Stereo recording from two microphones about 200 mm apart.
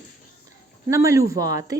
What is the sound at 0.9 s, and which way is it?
Speech, 15° right (ahead or behind).